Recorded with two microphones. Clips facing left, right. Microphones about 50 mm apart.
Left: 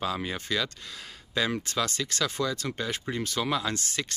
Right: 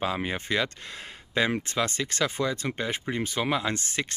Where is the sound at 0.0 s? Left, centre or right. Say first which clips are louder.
Right 2 dB; right.